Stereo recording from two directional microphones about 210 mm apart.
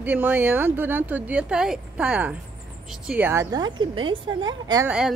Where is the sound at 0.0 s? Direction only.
10° right (ahead or behind).